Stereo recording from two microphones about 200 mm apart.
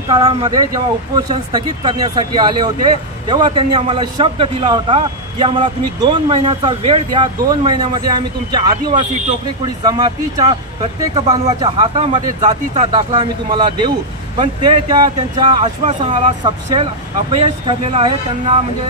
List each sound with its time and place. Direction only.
0.1 s a man's voice: 25° right (ahead or behind)
15.6 s a man's voice: 35° right (ahead or behind)